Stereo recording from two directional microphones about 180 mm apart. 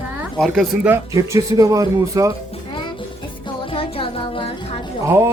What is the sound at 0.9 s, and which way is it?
Speech, 15° right (ahead or behind).